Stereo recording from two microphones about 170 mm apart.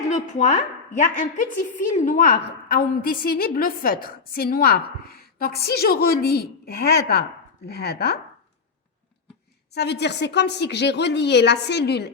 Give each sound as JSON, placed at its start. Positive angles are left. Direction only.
{"t": 0.1, "sound": "a woman's voice", "side_deg": 45}
{"t": 2.7, "sound": "a woman's voice", "side_deg": 60}
{"t": 9.7, "sound": "a woman's voice", "side_deg": 80}